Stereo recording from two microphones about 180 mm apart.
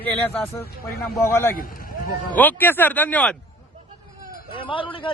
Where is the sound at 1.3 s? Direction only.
15° left (ahead or behind).